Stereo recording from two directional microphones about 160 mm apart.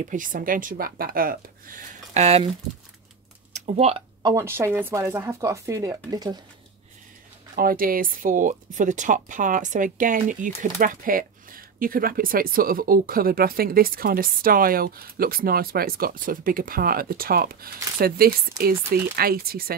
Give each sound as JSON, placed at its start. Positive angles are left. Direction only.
{"t": 0.0, "sound": "speech", "side_deg": -55}
{"t": 3.5, "sound": "speech", "side_deg": -45}
{"t": 4.2, "sound": "speech", "side_deg": -20}
{"t": 7.5, "sound": "speech", "side_deg": -65}